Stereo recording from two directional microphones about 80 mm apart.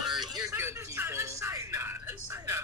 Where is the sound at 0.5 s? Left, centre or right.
Right.